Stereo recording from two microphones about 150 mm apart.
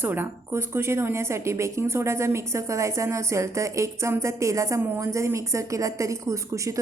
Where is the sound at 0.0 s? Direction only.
15° right (ahead or behind).